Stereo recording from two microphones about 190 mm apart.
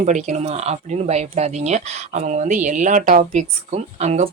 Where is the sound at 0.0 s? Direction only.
40° right (ahead or behind).